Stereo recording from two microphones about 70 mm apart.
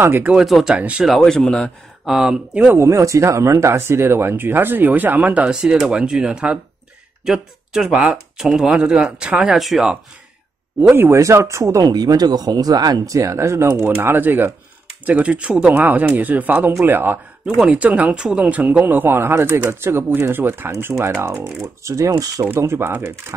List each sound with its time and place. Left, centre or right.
0.0 s speech: right
0.5 s speech: centre
0.7 s speech: centre
1.0 s speech: centre
2.0 s speech: centre
2.7 s speech: right; by 9.6 s centre
9.6 s speech: centre
10.8 s speech: right
11.1 s speech: right
11.8 s speech: right
17.6 s speech: centre
21.8 s speech: right
22.6 s speech: right